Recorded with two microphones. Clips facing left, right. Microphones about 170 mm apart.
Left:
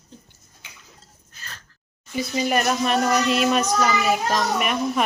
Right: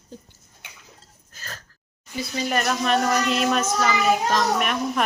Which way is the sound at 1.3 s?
40° right (ahead or behind).